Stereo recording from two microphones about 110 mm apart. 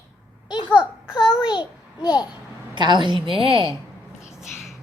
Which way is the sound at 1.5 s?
40° left (ahead or behind).